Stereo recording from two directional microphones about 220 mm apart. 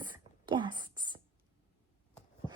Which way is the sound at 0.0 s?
20° right (ahead or behind).